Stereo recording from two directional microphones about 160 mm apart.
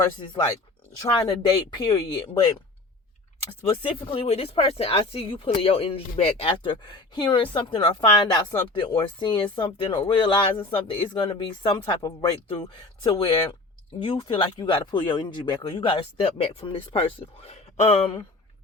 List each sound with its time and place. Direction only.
0.9 s speech: 25° left (ahead or behind)
3.7 s speech: 35° left (ahead or behind)